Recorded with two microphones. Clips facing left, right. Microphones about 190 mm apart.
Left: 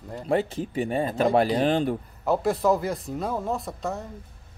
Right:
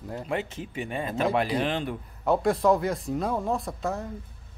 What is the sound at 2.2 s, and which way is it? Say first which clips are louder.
Speech: even; centre (ahead or behind).